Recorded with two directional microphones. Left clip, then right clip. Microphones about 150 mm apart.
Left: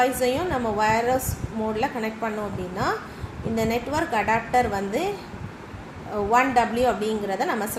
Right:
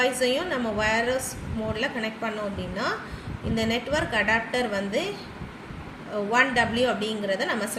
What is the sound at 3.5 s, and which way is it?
A woman's voice, 85° left.